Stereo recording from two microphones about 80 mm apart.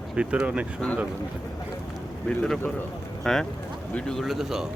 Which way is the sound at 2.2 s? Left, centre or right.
Centre.